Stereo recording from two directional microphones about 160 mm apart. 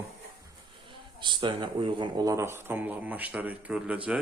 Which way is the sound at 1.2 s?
30° right (ahead or behind).